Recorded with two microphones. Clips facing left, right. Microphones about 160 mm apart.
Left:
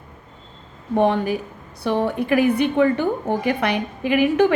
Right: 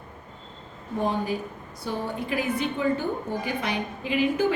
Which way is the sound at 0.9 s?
75° left (ahead or behind).